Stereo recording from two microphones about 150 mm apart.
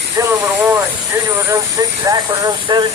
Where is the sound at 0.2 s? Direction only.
20° right (ahead or behind).